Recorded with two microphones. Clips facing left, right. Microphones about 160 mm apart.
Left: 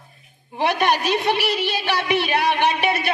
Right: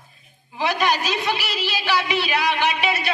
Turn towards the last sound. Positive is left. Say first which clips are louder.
# left 2 dB
turn(degrees=55)  # may be behind; listen again after turning